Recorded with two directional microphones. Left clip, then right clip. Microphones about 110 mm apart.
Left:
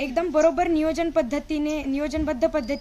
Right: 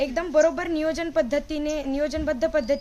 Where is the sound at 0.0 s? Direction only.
30° right (ahead or behind).